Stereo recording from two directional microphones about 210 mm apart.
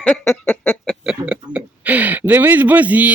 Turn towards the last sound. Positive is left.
turn(degrees=-5)  # may be behind; listen again after turning